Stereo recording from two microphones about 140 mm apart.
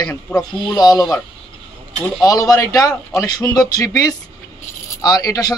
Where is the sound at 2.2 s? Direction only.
25° left (ahead or behind).